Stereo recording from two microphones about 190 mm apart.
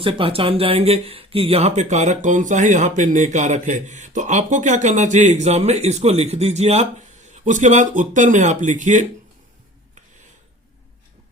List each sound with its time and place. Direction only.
0.0 s speech: 30° right (ahead or behind)